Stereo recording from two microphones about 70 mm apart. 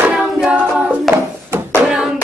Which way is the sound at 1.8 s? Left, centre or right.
Centre.